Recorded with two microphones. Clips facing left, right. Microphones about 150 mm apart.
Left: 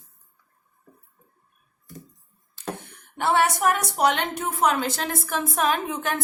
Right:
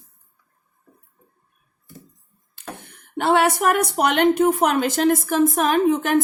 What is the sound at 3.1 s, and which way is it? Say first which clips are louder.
A woman's voice: right 4 dB; 65° right (ahead or behind).